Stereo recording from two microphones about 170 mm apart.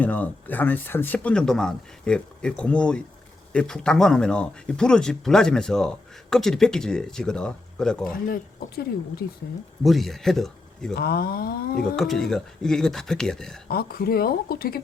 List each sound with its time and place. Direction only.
0.0 s speech: 10° left (ahead or behind)
8.1 s speech: 60° left (ahead or behind)
9.8 s speech: centre (ahead or behind)
10.9 s speech: 65° left (ahead or behind)
11.9 s speech: centre (ahead or behind)
13.7 s speech: 65° left (ahead or behind)